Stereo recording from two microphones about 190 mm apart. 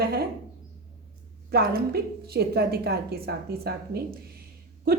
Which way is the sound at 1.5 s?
55° right (ahead or behind).